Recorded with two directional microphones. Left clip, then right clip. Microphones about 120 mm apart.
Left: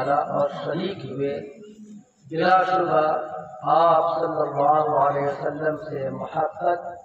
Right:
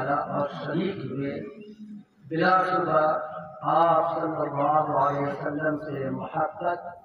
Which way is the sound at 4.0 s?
10° left (ahead or behind).